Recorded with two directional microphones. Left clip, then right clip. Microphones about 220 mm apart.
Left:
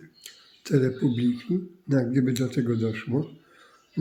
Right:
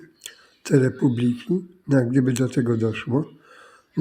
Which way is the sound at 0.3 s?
20° right (ahead or behind).